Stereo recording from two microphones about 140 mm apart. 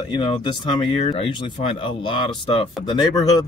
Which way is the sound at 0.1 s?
35° left (ahead or behind).